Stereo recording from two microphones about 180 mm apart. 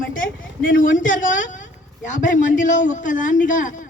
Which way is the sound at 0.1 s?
50° left (ahead or behind).